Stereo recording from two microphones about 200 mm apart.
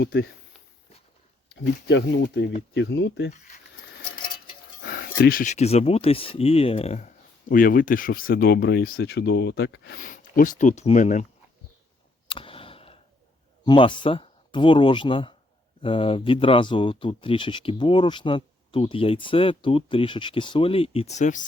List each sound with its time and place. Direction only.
0.0 s speech: 55° left (ahead or behind)
1.5 s speech: 60° left (ahead or behind)
4.8 s speech: 50° left (ahead or behind)
12.3 s a sound: 25° left (ahead or behind)
13.7 s speech: 25° left (ahead or behind)